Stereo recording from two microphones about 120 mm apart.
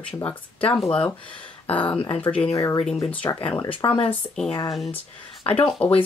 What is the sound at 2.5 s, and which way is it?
Speech, 25° left (ahead or behind).